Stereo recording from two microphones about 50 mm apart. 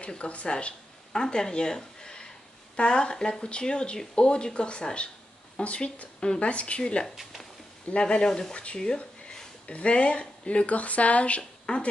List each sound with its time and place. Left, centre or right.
0.0 s a woman's voice: left